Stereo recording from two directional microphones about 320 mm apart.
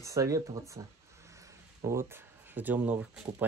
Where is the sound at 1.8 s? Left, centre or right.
Centre.